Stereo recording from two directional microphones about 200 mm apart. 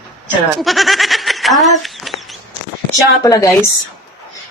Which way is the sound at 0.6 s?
Centre (ahead or behind).